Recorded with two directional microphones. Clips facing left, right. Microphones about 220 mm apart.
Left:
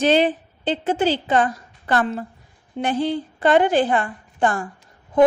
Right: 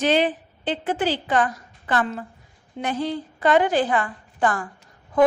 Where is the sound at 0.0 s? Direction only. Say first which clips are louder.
Left 3 dB; 25° left (ahead or behind).